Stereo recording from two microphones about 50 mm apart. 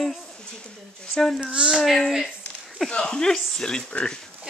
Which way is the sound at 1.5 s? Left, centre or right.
Centre.